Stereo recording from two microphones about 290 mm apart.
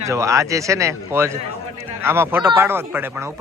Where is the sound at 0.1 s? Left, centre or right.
Centre.